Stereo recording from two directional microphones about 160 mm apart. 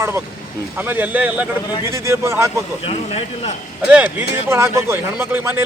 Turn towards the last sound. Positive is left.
turn(degrees=-15)  # may be behind; listen again after turning